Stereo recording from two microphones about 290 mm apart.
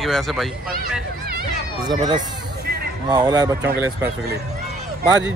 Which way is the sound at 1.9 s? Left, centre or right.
Centre.